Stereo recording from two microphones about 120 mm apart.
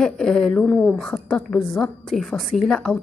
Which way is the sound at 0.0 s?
5° left (ahead or behind).